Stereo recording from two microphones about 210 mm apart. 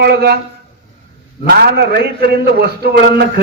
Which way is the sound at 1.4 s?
50° right (ahead or behind).